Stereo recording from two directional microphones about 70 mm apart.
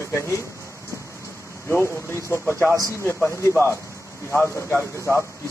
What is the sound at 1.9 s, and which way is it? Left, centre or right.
Speech, left.